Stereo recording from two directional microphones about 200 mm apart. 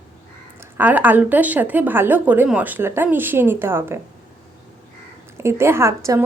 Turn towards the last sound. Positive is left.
turn(degrees=-15)  # may be behind; listen again after turning